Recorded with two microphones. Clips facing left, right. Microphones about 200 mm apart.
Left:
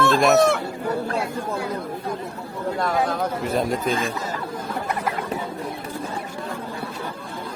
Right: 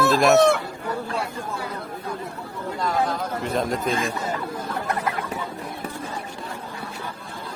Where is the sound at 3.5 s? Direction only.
Centre (ahead or behind).